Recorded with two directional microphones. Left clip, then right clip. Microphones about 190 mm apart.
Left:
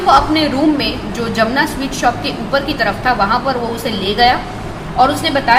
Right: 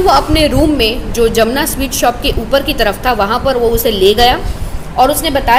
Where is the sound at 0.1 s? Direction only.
55° right (ahead or behind).